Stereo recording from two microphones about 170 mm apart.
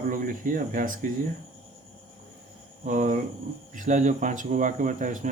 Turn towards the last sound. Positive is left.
turn(degrees=-50)  # may be behind; listen again after turning